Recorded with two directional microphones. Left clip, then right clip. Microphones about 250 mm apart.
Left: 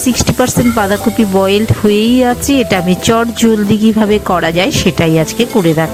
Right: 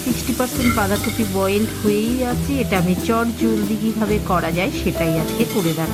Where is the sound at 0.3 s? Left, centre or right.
Left.